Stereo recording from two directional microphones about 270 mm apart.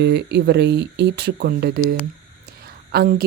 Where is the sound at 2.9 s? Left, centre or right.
Right.